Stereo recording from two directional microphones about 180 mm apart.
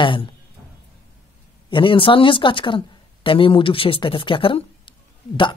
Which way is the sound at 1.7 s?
30° left (ahead or behind).